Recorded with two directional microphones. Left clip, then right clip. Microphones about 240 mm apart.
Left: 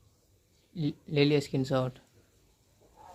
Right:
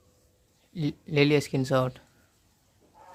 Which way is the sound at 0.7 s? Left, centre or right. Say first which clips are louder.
Right 3 dB; right.